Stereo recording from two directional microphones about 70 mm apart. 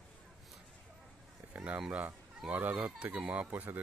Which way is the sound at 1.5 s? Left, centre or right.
Right.